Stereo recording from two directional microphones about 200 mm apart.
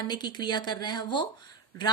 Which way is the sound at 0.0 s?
20° left (ahead or behind).